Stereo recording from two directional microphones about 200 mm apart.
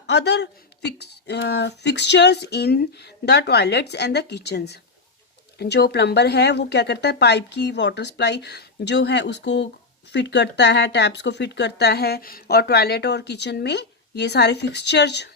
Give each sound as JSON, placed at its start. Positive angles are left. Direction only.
{"t": 0.1, "sound": "speech", "side_deg": 60}